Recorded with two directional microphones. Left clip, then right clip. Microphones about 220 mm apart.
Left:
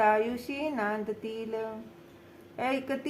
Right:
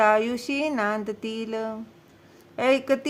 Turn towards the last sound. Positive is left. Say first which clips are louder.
# right 9 dB
turn(degrees=-45)  # may be behind; listen again after turning